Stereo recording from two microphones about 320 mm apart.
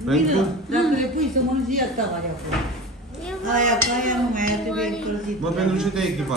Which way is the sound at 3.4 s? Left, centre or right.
Right.